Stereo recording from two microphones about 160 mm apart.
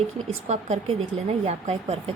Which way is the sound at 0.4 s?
45° right (ahead or behind).